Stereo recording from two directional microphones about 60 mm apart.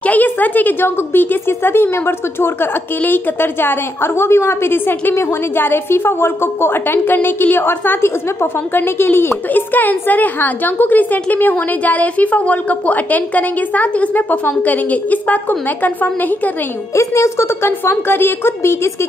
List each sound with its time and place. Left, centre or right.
0.0 s a woman's voice: left
16.9 s a woman's voice: left